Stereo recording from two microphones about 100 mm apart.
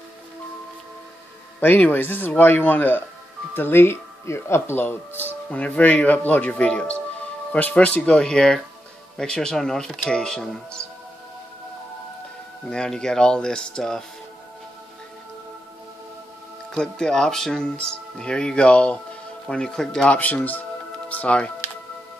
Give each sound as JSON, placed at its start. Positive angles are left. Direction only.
{"t": 1.6, "sound": "speech", "side_deg": 20}
{"t": 12.6, "sound": "speech", "side_deg": 10}
{"t": 16.7, "sound": "speech", "side_deg": 5}